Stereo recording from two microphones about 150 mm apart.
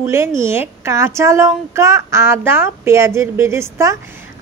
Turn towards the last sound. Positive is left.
turn(degrees=-20)  # may be behind; listen again after turning